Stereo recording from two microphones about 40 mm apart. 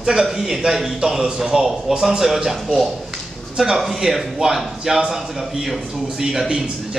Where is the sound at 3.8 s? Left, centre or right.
Centre.